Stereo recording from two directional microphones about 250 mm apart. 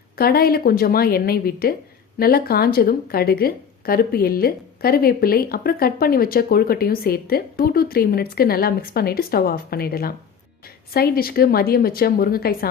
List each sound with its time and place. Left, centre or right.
0.2 s a woman's voice: left